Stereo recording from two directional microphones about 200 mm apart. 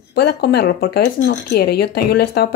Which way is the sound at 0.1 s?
55° left (ahead or behind).